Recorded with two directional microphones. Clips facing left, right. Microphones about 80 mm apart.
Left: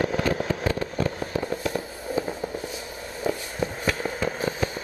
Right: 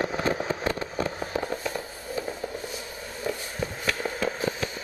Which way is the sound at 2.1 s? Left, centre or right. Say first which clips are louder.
Left 4 dB; centre.